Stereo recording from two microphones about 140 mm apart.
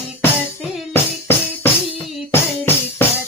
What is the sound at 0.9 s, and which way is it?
Music, 15° left (ahead or behind).